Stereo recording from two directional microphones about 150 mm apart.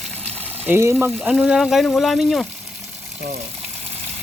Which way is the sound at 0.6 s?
15° right (ahead or behind).